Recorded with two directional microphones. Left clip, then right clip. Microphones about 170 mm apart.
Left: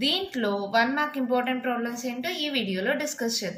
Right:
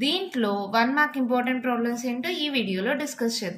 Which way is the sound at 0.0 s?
30° right (ahead or behind).